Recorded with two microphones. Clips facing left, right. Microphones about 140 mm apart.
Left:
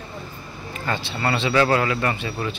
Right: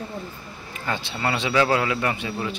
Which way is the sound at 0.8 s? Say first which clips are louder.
Left 1 dB; 10° right (ahead or behind).